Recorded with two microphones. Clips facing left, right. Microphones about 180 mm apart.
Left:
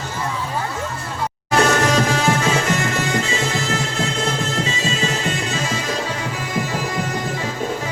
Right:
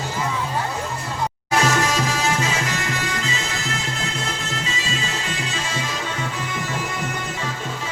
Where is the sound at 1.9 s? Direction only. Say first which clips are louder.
Left 5 dB; 55° left (ahead or behind).